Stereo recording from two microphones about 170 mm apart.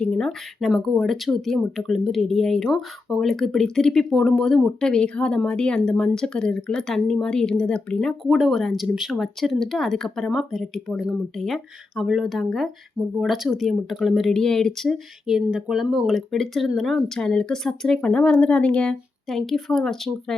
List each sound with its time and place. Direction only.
0.0 s speech: 5° left (ahead or behind)